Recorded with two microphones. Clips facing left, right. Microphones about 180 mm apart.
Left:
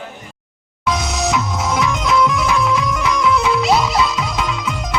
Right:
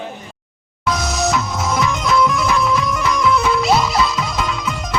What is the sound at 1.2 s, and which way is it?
Music, centre (ahead or behind).